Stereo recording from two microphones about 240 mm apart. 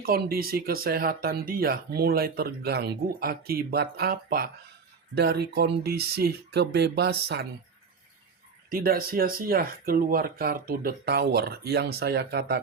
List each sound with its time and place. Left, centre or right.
0.0 s speech: right
8.7 s speech: right